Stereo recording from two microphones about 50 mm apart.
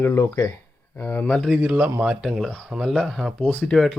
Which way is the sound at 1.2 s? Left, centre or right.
Left.